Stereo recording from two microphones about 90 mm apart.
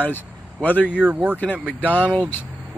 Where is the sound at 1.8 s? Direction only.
20° left (ahead or behind).